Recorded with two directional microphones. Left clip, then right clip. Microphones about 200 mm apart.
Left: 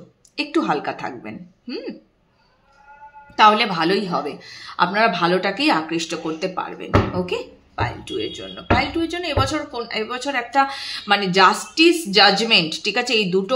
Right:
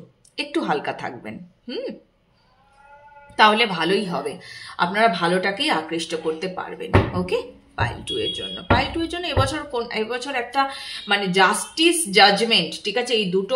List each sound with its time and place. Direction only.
0.4 s speech: 10° left (ahead or behind)
3.3 s speech: 15° left (ahead or behind)
7.2 s speech: 10° left (ahead or behind); by 13.4 s 30° left (ahead or behind)